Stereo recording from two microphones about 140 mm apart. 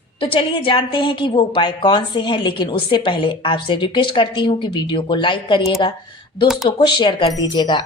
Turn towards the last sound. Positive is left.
turn(degrees=35)  # may be behind; listen again after turning